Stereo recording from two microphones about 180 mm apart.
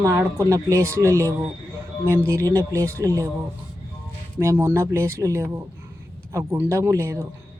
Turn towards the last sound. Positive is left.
turn(degrees=-15)  # may be behind; listen again after turning